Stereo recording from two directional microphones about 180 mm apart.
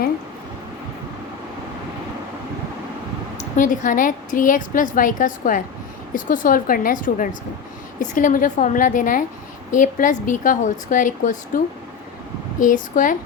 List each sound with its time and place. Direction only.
3.3 s a woman's voice: 45° left (ahead or behind)